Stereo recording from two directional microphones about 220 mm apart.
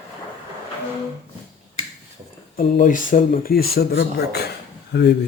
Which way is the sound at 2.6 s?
40° left (ahead or behind).